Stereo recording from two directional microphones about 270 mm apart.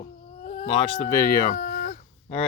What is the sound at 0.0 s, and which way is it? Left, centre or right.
Cat, left.